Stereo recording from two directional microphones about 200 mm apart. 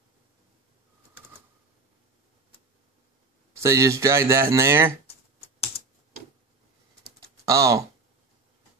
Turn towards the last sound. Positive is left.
turn(degrees=-15)  # may be behind; listen again after turning